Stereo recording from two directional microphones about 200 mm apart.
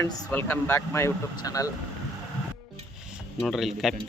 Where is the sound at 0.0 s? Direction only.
10° left (ahead or behind).